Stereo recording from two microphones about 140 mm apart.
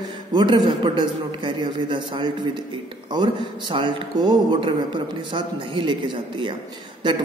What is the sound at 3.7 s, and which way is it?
A man's voice, 35° right (ahead or behind).